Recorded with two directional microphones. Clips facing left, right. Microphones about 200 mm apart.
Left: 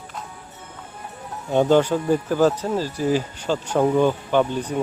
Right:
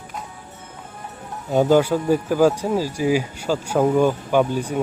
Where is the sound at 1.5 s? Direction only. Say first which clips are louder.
Right 1 dB; 5° right (ahead or behind).